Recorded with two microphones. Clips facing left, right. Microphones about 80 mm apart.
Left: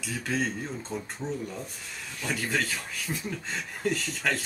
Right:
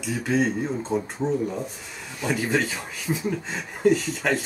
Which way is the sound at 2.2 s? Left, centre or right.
Centre.